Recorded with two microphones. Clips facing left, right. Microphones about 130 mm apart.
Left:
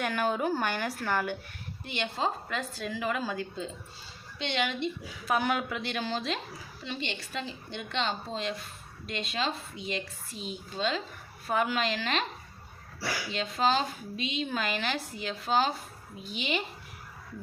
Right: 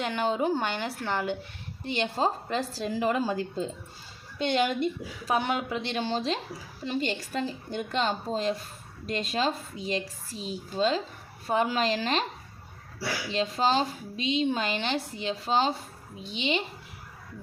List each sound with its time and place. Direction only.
0.0 s a woman's voice: 20° right (ahead or behind)
1.8 s speech: 35° right (ahead or behind)
5.3 s a woman's voice: 25° right (ahead or behind)
13.3 s a woman's voice: 35° right (ahead or behind)